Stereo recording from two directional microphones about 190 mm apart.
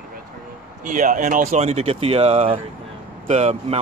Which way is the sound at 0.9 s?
40° right (ahead or behind).